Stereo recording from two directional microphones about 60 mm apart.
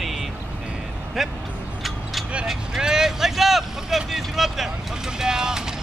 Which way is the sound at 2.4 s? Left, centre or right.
Centre.